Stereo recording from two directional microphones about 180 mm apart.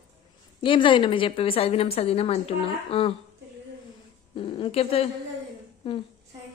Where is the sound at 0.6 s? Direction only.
30° left (ahead or behind).